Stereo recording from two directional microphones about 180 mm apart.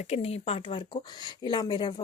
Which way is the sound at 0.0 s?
35° left (ahead or behind).